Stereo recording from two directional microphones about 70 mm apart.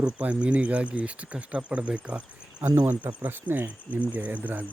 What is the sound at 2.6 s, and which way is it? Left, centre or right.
Speech, right.